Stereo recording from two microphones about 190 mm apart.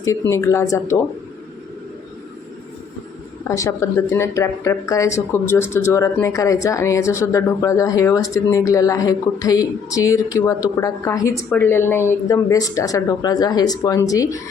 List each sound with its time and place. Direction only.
0.0 s speech: 15° left (ahead or behind)
3.4 s speech: 15° left (ahead or behind)